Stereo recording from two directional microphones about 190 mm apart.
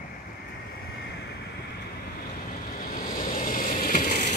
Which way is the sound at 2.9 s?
45° left (ahead or behind).